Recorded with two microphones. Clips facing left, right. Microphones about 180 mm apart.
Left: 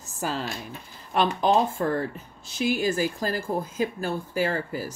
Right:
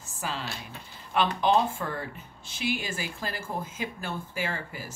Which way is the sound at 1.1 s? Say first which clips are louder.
Left 2 dB; 40° left (ahead or behind).